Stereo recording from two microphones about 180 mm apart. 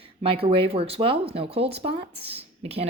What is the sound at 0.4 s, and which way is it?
Speech, 30° right (ahead or behind).